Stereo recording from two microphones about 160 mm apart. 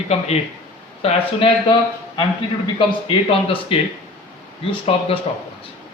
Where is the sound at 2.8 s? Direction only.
35° left (ahead or behind).